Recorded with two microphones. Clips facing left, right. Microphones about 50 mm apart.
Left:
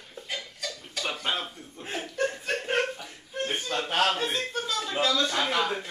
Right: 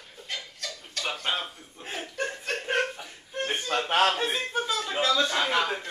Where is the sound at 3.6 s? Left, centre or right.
Right; by 5.8 s centre.